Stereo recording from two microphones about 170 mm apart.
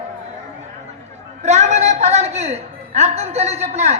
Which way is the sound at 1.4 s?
40° right (ahead or behind).